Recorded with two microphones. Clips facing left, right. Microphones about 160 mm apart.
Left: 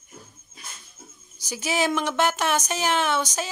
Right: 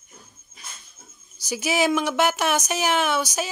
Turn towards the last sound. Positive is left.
turn(degrees=-10)  # may be behind; listen again after turning